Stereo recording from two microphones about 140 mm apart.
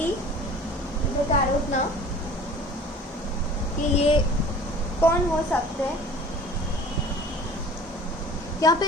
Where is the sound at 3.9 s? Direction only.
45° left (ahead or behind).